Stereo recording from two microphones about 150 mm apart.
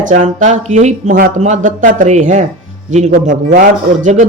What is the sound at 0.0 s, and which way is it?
A man's voice, 60° right (ahead or behind).